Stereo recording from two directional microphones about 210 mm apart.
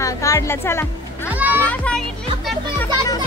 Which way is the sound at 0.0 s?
15° left (ahead or behind).